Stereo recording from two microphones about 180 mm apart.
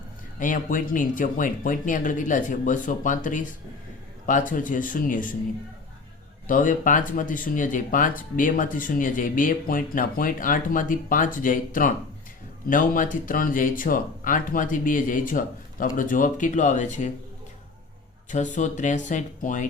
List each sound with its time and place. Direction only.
0.3 s speech: 50° left (ahead or behind)
6.5 s speech: 45° left (ahead or behind)
18.3 s speech: 45° left (ahead or behind)